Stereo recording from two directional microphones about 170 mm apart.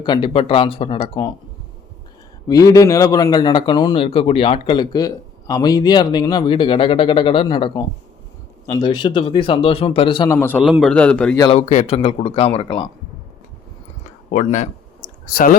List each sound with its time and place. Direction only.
0.0 s a man's voice: 25° left (ahead or behind)
2.5 s a man's voice: 20° left (ahead or behind)
10.2 s a man's voice: 15° left (ahead or behind)
10.6 s a man's voice: centre (ahead or behind)
11.5 s a man's voice: 35° left (ahead or behind)
14.3 s speech: 45° left (ahead or behind)